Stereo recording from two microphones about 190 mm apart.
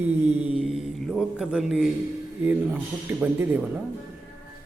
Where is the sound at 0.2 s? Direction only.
35° right (ahead or behind).